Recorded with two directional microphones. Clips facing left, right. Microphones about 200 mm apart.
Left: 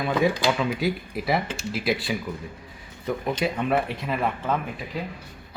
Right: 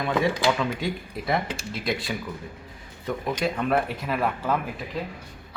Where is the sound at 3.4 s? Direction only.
Centre (ahead or behind).